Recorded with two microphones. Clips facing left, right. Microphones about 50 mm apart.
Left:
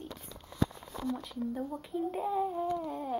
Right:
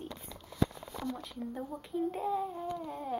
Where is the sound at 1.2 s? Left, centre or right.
Centre.